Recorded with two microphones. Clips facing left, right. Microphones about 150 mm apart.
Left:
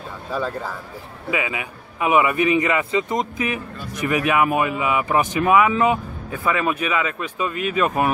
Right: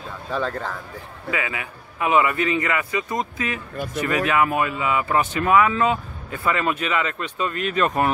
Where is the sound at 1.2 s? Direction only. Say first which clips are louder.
Left 3 dB; 20° left (ahead or behind).